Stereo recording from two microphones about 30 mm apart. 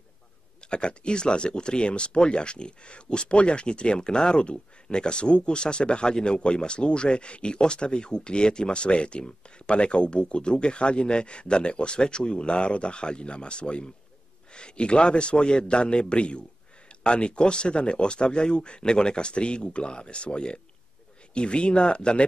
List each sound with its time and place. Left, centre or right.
0.7 s speech: left